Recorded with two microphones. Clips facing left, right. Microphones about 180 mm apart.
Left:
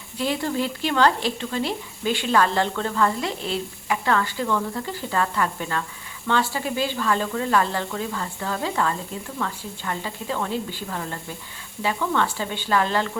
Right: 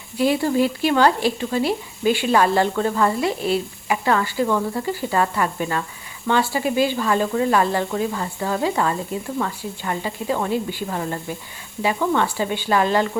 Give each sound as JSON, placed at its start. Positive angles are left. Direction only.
{"t": 0.2, "sound": "speech", "side_deg": -10}